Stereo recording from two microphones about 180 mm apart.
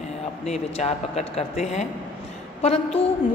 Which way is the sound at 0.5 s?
35° left (ahead or behind).